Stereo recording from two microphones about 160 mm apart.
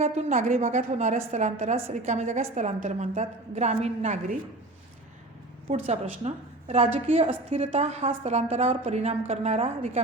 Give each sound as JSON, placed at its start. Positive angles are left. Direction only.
{"t": 0.0, "sound": "a woman's voice", "side_deg": -45}
{"t": 5.7, "sound": "a woman's voice", "side_deg": -40}